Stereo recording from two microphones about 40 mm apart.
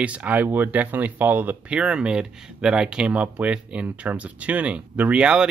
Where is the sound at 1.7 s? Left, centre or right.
Right.